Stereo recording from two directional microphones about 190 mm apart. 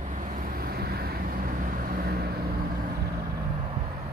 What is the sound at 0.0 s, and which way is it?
Vehicle, 40° right (ahead or behind).